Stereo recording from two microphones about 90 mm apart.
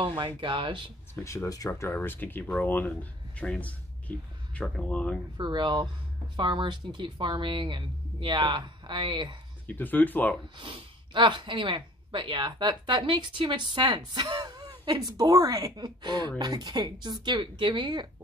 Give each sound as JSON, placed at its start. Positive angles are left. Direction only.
{"t": 0.0, "sound": "speech", "side_deg": -65}
{"t": 1.1, "sound": "speech", "side_deg": 35}
{"t": 5.4, "sound": "speech", "side_deg": -55}
{"t": 9.7, "sound": "speech", "side_deg": 20}
{"t": 10.6, "sound": "speech", "side_deg": -65}